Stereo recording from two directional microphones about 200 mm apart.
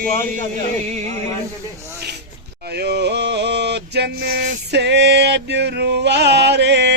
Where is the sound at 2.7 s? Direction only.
55° right (ahead or behind).